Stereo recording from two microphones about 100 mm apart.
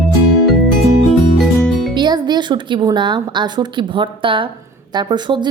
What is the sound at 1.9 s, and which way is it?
Music, 45° right (ahead or behind).